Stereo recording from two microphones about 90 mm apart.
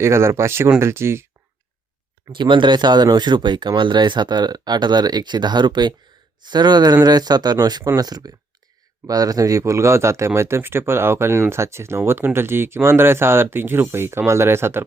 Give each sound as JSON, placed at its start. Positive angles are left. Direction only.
{"t": 0.0, "sound": "speech", "side_deg": -30}
{"t": 2.3, "sound": "speech", "side_deg": -65}